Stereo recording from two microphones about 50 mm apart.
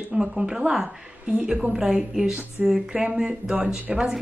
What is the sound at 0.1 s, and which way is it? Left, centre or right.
A woman's voice, centre.